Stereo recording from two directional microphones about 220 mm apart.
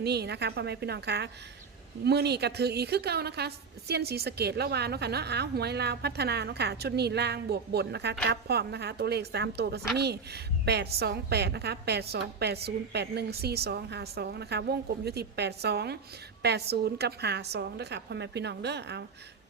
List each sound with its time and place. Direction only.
0.0 s a woman's voice: 50° right (ahead or behind)